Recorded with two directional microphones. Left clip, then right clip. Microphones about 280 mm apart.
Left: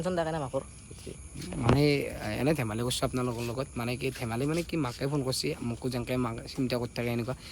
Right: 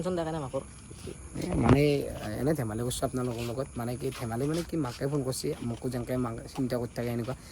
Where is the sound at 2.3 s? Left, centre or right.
Centre.